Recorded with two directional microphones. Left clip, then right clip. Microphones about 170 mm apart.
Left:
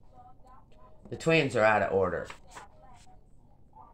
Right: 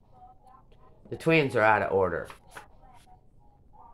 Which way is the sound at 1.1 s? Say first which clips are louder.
Right 2 dB; 35° right (ahead or behind).